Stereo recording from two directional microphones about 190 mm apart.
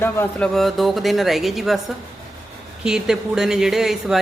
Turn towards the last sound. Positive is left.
turn(degrees=0)  # may be behind; listen again after turning